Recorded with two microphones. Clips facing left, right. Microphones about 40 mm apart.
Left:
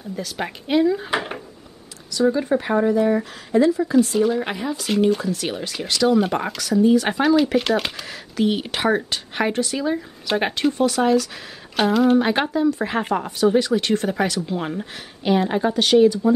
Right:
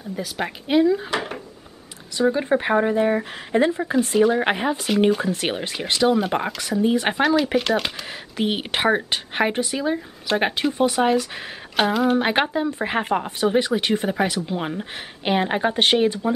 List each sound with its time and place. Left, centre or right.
0.1 s speech: centre
2.1 s speech: right
7.5 s speech: centre
8.1 s speech: right
11.7 s speech: centre
12.2 s speech: right
15.0 s speech: right